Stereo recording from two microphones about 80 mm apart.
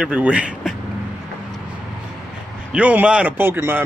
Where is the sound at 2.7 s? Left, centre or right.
Centre.